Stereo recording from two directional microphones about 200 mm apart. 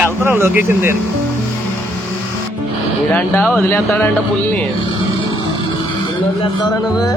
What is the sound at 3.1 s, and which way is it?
A man's voice, 5° left (ahead or behind).